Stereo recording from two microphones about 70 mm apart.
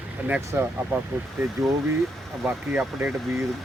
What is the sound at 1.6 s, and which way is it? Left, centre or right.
Speech, centre.